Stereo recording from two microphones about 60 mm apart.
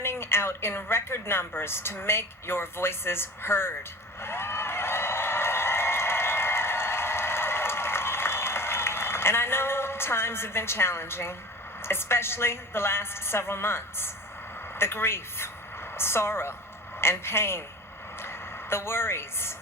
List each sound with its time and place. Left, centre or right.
0.0 s a woman's voice: left
4.2 s a sound: left
11.8 s a woman's voice: left